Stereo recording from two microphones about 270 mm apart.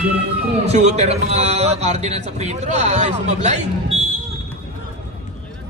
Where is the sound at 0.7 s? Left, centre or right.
Right.